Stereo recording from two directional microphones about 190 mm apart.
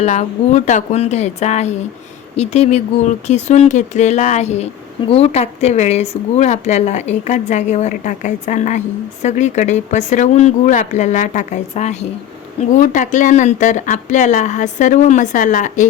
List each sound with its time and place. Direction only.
0.0 s speech: 40° left (ahead or behind)